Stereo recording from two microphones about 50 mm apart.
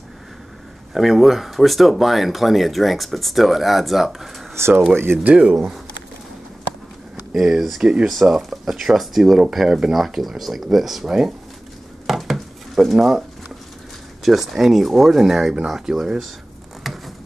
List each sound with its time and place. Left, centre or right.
0.9 s speech: centre
4.6 s speech: right
5.2 s speech: right
7.3 s speech: centre
12.1 s dishes: centre
14.2 s speech: centre
16.8 s a sound: centre